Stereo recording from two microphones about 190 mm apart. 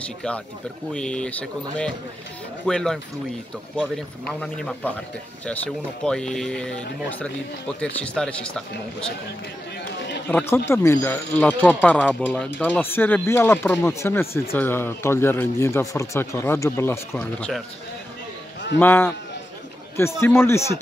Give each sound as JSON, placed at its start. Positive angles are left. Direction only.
{"t": 0.9, "sound": "speech", "side_deg": 5}
{"t": 6.0, "sound": "speech", "side_deg": 5}
{"t": 10.3, "sound": "speech", "side_deg": 15}
{"t": 18.8, "sound": "speech", "side_deg": 10}